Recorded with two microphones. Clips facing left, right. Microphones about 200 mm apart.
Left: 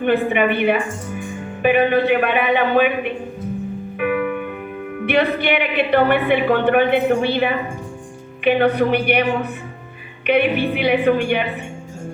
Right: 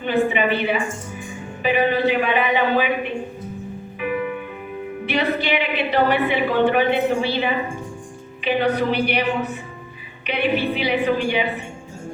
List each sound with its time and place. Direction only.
0.0 s a woman's voice: 55° left (ahead or behind)
4.0 s music: 60° left (ahead or behind)
5.0 s a woman's voice: 55° left (ahead or behind)